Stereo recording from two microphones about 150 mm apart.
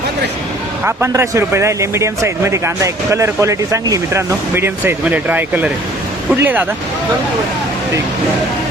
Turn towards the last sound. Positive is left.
turn(degrees=-15)  # may be behind; listen again after turning